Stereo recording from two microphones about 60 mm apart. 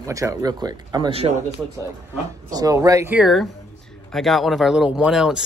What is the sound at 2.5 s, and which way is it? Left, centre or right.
Speech, right.